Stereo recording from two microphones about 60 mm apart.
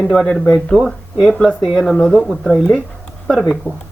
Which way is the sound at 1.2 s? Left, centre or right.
Centre.